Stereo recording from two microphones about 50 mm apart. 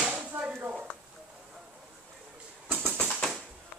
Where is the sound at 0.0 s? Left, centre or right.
Right.